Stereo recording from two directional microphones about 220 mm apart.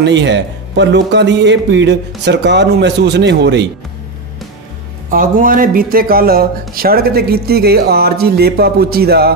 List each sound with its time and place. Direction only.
0.0 s a man's voice: 55° right (ahead or behind)
5.1 s a man's voice: 40° right (ahead or behind)